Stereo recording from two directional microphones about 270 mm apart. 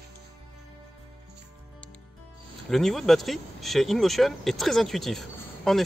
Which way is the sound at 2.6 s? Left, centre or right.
Centre.